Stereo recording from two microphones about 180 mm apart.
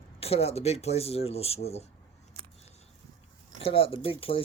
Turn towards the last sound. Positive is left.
turn(degrees=30)  # may be behind; listen again after turning